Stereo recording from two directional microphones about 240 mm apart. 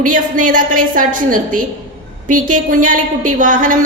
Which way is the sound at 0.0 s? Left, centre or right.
Right.